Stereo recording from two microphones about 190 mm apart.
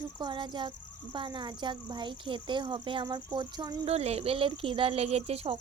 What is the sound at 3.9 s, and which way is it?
Speech, 35° right (ahead or behind).